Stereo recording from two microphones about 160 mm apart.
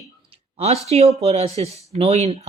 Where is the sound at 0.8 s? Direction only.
40° right (ahead or behind).